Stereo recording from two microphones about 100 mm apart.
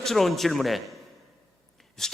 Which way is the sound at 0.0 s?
Centre (ahead or behind).